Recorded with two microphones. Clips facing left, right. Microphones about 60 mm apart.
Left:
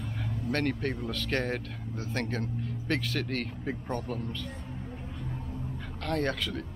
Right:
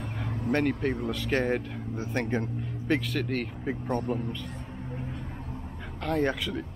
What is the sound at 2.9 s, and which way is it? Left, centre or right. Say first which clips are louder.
Speech: right 4 dB; centre.